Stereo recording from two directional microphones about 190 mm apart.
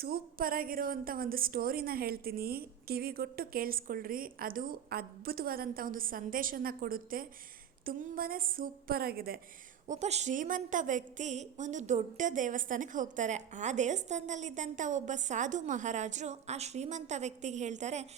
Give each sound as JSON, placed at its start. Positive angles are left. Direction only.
{"t": 0.0, "sound": "a woman's voice", "side_deg": -50}
{"t": 9.8, "sound": "a woman's voice", "side_deg": -35}